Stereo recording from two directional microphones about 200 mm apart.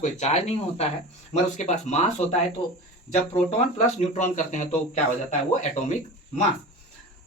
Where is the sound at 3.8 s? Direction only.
35° left (ahead or behind).